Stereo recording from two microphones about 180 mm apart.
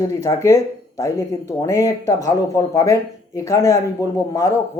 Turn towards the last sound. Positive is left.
turn(degrees=15)  # may be behind; listen again after turning